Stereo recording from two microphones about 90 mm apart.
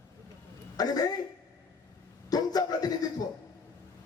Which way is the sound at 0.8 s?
45° left (ahead or behind).